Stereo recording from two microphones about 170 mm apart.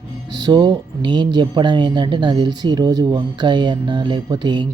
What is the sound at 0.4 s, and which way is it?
Speech, 25° right (ahead or behind).